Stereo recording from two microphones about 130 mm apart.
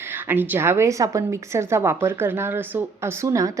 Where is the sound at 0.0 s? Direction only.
15° right (ahead or behind).